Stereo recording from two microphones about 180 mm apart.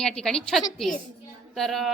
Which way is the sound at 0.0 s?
5° left (ahead or behind).